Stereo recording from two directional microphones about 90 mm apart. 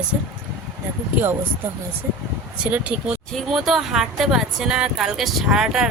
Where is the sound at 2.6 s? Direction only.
15° right (ahead or behind).